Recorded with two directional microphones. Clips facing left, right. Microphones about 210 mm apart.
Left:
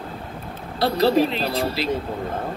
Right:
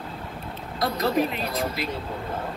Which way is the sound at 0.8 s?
30° left (ahead or behind).